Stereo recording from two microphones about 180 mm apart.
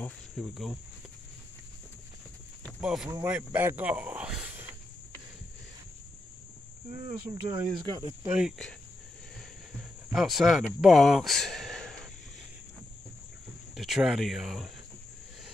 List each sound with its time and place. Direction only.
0.0 s speech: centre (ahead or behind)
2.8 s speech: 5° right (ahead or behind)
7.4 s speech: 25° right (ahead or behind)
8.3 s speech: 5° right (ahead or behind)
10.1 s speech: centre (ahead or behind)
13.7 s speech: 5° right (ahead or behind)